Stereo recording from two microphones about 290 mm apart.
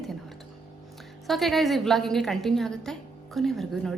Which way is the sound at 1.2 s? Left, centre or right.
Centre.